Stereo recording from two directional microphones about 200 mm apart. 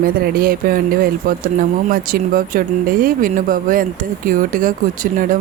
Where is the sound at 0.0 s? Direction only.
50° right (ahead or behind).